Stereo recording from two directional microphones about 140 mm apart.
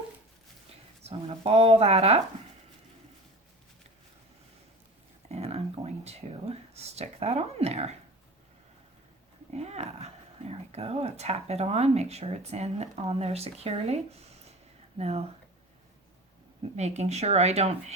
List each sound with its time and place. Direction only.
1.0 s speech: 45° right (ahead or behind)
5.3 s a sound: 50° right (ahead or behind)
9.5 s speech: 50° right (ahead or behind)
16.7 s speech: 55° right (ahead or behind)